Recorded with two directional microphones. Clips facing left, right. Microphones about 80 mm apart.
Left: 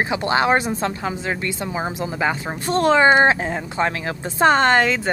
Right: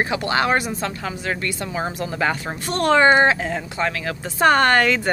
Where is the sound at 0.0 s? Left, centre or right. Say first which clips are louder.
Left 1 dB; left.